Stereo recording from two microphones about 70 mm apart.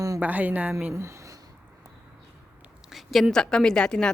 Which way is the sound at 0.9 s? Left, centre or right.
Right.